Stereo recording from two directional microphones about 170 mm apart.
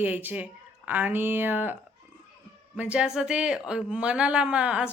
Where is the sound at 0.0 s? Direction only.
10° right (ahead or behind).